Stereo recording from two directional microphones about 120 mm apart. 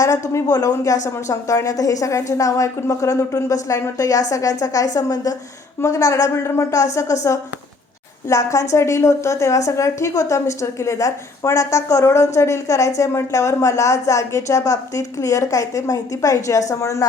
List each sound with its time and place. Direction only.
0.0 s a woman's voice: 30° left (ahead or behind)
8.3 s a woman's voice: 25° left (ahead or behind)